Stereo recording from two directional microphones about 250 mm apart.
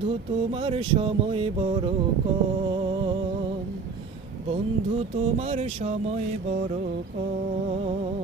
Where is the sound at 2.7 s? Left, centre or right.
Right.